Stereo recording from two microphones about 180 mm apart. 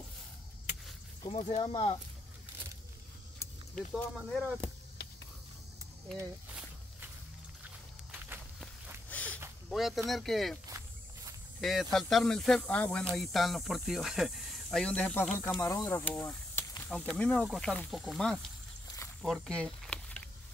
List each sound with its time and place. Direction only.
1.3 s speech: 35° left (ahead or behind)
3.7 s speech: centre (ahead or behind)
9.1 s a sound: 10° left (ahead or behind)
9.7 s speech: centre (ahead or behind)
11.6 s speech: centre (ahead or behind)
19.2 s a sound: centre (ahead or behind)